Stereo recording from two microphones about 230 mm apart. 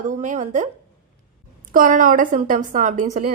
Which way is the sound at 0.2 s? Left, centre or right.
Right.